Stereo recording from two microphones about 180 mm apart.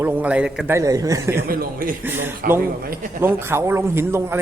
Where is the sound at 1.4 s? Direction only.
55° right (ahead or behind).